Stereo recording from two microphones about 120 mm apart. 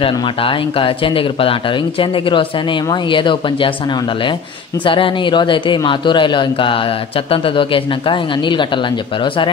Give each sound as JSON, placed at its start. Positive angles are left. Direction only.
{"t": 0.0, "sound": "speech", "side_deg": 45}